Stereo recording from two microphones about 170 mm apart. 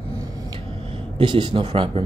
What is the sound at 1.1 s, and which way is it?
Speech, 30° right (ahead or behind).